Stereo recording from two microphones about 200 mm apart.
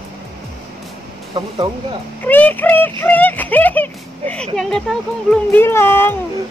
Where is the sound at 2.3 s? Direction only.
10° left (ahead or behind).